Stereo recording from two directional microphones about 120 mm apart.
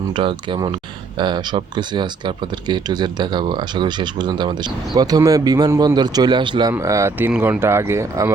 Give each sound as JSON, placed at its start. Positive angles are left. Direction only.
{"t": 0.1, "sound": "speech", "side_deg": -45}
{"t": 6.7, "sound": "speech", "side_deg": -25}